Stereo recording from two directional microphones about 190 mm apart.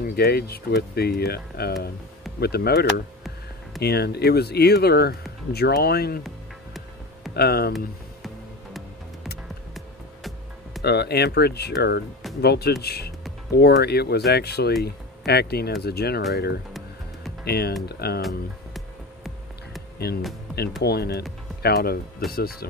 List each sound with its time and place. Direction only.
0.0 s speech: 55° left (ahead or behind)
7.3 s speech: 55° left (ahead or behind)
9.8 s music: centre (ahead or behind)
10.8 s speech: 60° left (ahead or behind)
17.5 s speech: 55° left (ahead or behind)
18.2 s music: centre (ahead or behind)
20.1 s speech: 55° left (ahead or behind)